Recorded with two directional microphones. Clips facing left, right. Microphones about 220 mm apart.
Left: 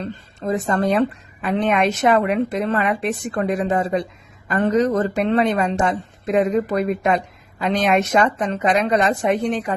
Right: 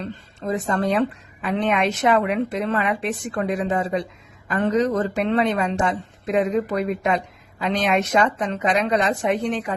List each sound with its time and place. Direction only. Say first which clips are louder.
0.0 s a woman's voice: left 3 dB; 40° left (ahead or behind)